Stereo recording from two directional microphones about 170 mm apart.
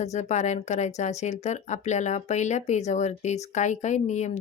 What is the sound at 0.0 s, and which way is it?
Speech, 40° left (ahead or behind).